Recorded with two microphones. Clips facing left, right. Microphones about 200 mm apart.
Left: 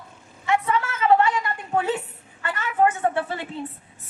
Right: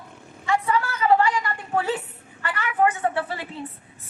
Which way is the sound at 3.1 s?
25° left (ahead or behind).